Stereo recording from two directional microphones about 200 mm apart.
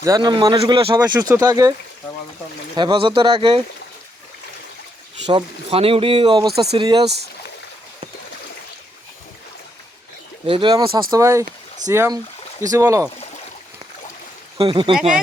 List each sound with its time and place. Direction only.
0.0 s speech: 20° right (ahead or behind)
2.7 s speech: 25° right (ahead or behind)
5.2 s speech: 30° right (ahead or behind)
10.4 s speech: 25° right (ahead or behind)
14.6 s speech: 25° right (ahead or behind)